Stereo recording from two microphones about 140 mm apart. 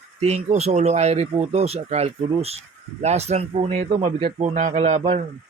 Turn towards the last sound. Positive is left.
turn(degrees=-50)  # may be behind; listen again after turning